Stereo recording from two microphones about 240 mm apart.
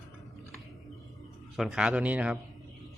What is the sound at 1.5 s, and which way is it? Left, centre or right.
Speech, centre.